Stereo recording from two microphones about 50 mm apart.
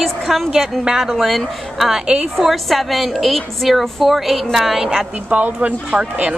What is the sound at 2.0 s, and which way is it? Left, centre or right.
Speech, right.